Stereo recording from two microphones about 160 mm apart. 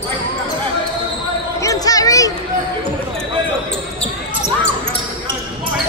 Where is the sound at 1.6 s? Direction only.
20° left (ahead or behind).